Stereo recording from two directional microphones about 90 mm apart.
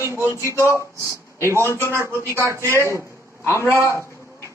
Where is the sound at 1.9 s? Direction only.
30° right (ahead or behind).